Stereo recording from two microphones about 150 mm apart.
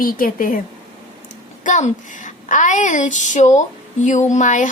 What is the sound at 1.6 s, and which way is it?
A woman's voice, 55° left (ahead or behind).